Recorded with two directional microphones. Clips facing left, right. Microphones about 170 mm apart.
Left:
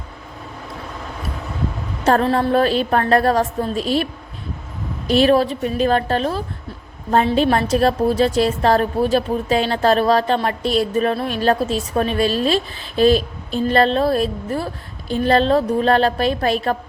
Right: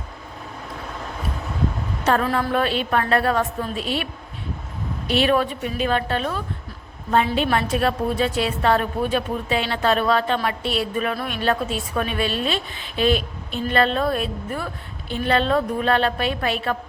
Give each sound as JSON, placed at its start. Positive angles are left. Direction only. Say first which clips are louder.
{"t": 2.2, "sound": "a woman's voice", "louder": "left 5 dB", "side_deg": 30}